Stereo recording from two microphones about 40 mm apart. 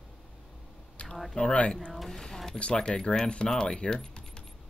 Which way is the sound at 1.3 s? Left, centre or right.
Left.